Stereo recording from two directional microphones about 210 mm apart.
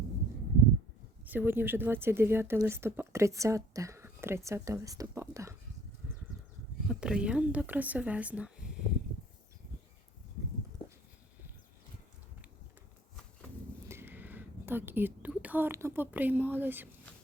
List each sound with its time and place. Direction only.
1.2 s speech: 10° right (ahead or behind)
6.8 s speech: 5° right (ahead or behind)
10.8 s a sound: 25° left (ahead or behind)
13.8 s speech: 10° right (ahead or behind)